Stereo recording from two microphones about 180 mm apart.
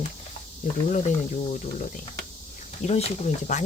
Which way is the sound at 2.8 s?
35° left (ahead or behind).